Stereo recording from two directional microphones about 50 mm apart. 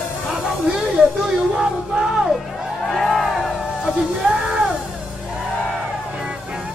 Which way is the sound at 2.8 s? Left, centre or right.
Centre.